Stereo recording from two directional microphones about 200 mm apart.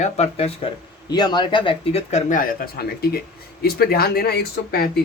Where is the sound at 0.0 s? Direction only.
35° left (ahead or behind); by 4.9 s 50° left (ahead or behind).